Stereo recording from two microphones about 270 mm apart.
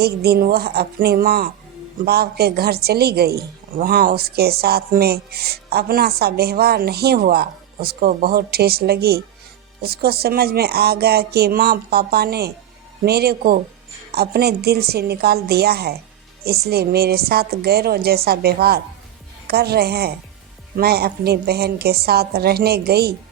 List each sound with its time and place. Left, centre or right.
0.0 s a woman's voice: right